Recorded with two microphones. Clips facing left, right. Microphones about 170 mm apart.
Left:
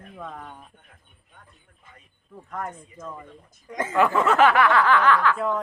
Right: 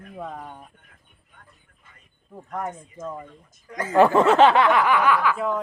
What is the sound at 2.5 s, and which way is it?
Speech, 20° right (ahead or behind).